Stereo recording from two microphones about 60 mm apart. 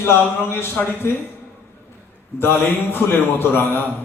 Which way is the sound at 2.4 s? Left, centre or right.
Left.